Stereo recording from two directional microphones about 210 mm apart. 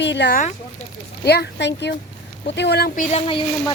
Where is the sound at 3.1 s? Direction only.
30° left (ahead or behind).